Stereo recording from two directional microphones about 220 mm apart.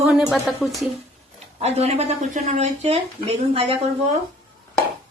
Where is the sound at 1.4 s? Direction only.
30° right (ahead or behind).